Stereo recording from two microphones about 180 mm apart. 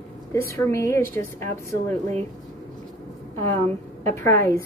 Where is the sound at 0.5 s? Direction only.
15° left (ahead or behind).